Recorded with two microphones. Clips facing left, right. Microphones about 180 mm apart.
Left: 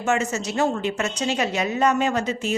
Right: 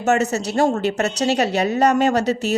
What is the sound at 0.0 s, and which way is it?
A woman's voice, 40° right (ahead or behind).